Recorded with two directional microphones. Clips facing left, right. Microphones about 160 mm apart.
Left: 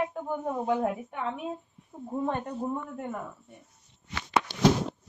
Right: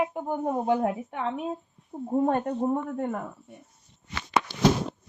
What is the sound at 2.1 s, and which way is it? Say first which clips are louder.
Speech: right 6 dB; 50° right (ahead or behind).